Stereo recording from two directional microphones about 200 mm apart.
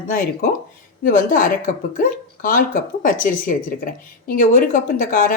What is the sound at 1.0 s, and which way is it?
A woman's voice, 45° left (ahead or behind).